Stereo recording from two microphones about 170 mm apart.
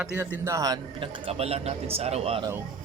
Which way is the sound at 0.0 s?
10° right (ahead or behind).